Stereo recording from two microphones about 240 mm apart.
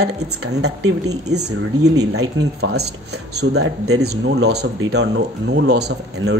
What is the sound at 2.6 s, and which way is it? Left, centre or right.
Speech, right.